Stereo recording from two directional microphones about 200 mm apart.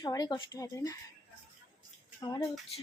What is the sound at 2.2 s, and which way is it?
Speech, 20° left (ahead or behind).